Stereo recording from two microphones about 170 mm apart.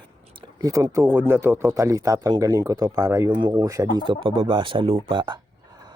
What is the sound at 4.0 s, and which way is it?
Speech, 30° right (ahead or behind).